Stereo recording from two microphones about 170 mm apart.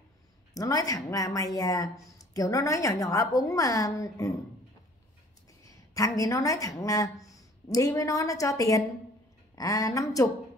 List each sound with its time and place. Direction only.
0.6 s speech: 20° left (ahead or behind)
5.6 s a woman's voice: 20° left (ahead or behind)